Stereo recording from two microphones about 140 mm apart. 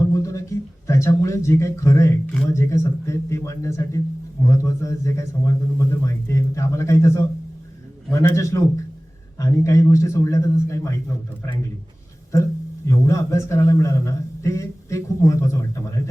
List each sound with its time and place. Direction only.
0.1 s a sound: 20° left (ahead or behind)
0.9 s a man's voice: 20° left (ahead or behind)
12.3 s a man's voice: 20° left (ahead or behind)